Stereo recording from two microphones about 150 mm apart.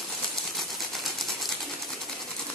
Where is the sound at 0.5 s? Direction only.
Centre (ahead or behind).